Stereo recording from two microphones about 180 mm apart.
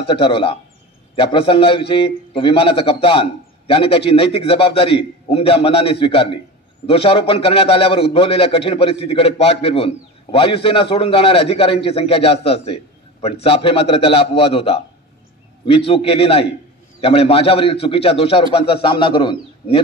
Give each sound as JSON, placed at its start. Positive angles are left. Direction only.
{"t": 0.0, "sound": "a man's voice", "side_deg": 30}